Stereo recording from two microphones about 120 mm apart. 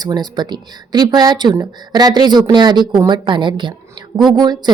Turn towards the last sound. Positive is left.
turn(degrees=-35)  # may be behind; listen again after turning